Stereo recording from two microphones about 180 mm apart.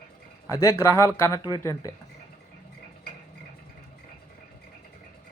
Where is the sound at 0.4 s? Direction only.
15° left (ahead or behind).